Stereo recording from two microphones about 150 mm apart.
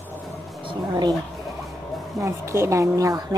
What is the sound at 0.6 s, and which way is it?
Roaring cats, 25° right (ahead or behind).